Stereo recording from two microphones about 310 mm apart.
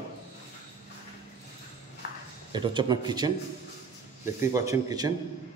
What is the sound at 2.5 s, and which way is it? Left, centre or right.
Speech, centre.